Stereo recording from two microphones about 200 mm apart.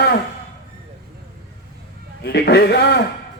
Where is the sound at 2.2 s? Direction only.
55° left (ahead or behind).